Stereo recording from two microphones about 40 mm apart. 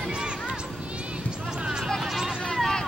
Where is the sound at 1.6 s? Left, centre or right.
Right.